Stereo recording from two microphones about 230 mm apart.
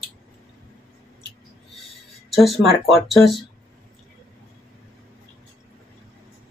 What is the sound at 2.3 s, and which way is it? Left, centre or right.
Speech, centre.